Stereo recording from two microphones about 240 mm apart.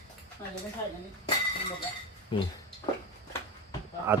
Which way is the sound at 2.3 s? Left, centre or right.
Left.